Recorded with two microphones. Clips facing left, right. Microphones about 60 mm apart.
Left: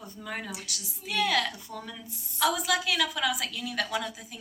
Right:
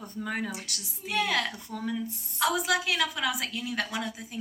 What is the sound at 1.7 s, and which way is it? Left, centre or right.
Speech, right.